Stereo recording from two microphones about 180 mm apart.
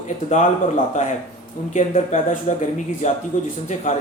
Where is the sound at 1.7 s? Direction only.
45° left (ahead or behind).